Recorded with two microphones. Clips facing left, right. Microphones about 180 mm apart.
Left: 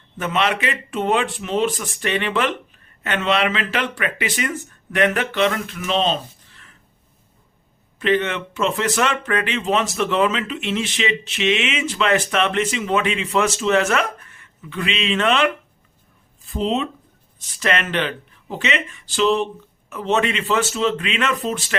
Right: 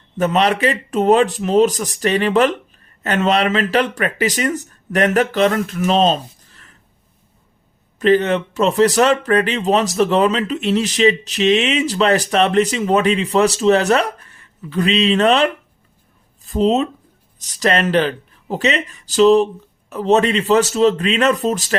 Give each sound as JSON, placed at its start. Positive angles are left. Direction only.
{"t": 0.2, "sound": "speech", "side_deg": -40}
{"t": 7.9, "sound": "speech", "side_deg": -40}